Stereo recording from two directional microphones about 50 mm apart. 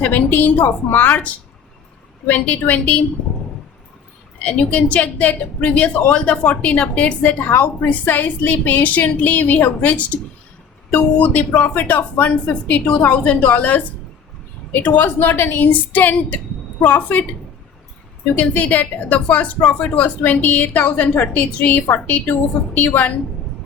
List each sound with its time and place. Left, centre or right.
0.0 s a woman's voice: left
4.4 s a woman's voice: left
18.3 s a woman's voice: left